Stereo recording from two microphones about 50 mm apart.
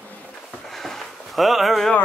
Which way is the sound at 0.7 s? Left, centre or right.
Centre.